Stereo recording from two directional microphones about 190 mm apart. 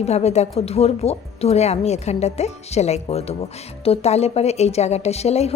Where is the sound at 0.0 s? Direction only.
35° left (ahead or behind).